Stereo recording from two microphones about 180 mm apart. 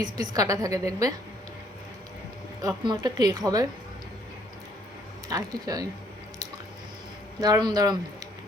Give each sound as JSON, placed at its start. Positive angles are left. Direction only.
{"t": 0.0, "sound": "a woman's voice", "side_deg": -20}
{"t": 2.6, "sound": "a woman's voice", "side_deg": -25}
{"t": 5.3, "sound": "a woman's voice", "side_deg": -20}
{"t": 7.3, "sound": "speech", "side_deg": -25}